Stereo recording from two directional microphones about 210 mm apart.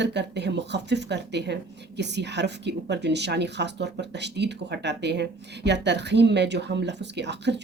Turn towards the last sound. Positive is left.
turn(degrees=-55)  # may be behind; listen again after turning